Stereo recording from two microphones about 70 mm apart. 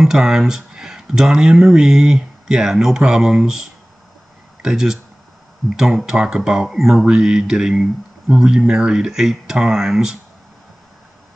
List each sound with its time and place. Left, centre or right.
0.0 s speech: centre